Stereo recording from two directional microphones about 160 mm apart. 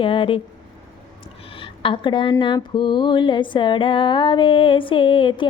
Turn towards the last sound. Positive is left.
turn(degrees=30)  # may be behind; listen again after turning